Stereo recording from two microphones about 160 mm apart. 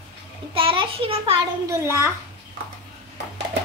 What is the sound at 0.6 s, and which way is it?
Speech, 35° right (ahead or behind).